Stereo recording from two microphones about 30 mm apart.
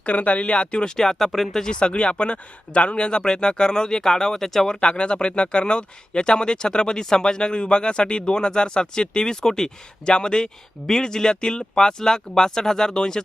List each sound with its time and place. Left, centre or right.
0.0 s speech: left
0.9 s speech: centre
1.8 s speech: left; by 4.6 s centre
4.6 s speech: left
10.1 s speech: left